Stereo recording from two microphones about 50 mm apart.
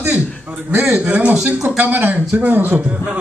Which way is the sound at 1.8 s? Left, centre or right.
Right.